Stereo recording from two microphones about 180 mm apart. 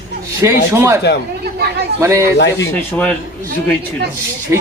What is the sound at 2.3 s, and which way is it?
Speech, 75° left (ahead or behind).